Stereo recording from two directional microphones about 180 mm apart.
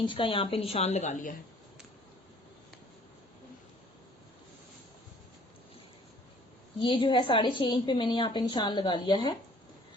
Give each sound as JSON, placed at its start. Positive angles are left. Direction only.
{"t": 0.0, "sound": "a woman's voice", "side_deg": 30}
{"t": 6.8, "sound": "a woman's voice", "side_deg": 25}